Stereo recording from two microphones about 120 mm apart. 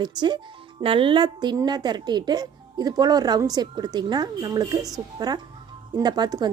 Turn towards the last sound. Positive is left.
turn(degrees=-35)  # may be behind; listen again after turning